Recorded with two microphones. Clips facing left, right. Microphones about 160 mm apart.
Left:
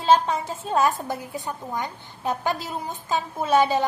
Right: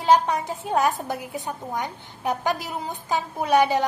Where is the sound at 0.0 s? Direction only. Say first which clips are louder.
Even; 15° right (ahead or behind).